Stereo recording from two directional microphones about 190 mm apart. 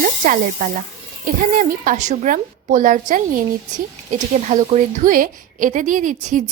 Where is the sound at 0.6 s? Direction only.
45° right (ahead or behind).